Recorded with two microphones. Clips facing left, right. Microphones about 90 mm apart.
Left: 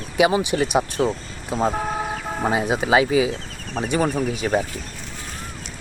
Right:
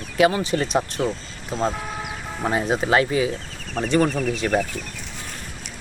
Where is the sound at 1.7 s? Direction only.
40° left (ahead or behind).